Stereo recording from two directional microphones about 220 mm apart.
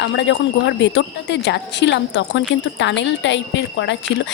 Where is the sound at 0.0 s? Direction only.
55° left (ahead or behind).